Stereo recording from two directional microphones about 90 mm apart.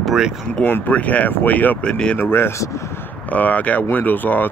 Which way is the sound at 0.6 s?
20° left (ahead or behind).